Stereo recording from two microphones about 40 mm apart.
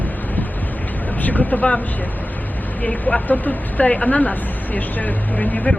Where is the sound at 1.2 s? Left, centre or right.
Left.